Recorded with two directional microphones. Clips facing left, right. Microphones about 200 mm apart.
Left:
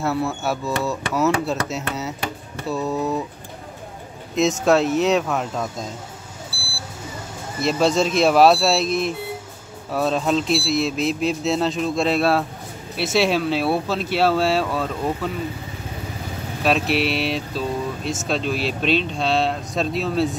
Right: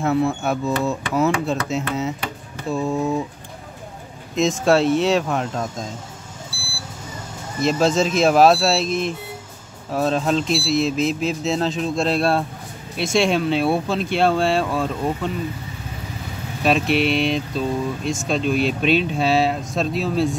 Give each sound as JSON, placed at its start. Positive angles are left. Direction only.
{"t": 0.0, "sound": "speech", "side_deg": 0}
{"t": 2.7, "sound": "speech", "side_deg": -15}
{"t": 4.4, "sound": "speech", "side_deg": 0}
{"t": 4.6, "sound": "speech", "side_deg": -30}
{"t": 5.4, "sound": "speech", "side_deg": 0}
{"t": 7.6, "sound": "speech", "side_deg": 0}
{"t": 16.6, "sound": "speech", "side_deg": 0}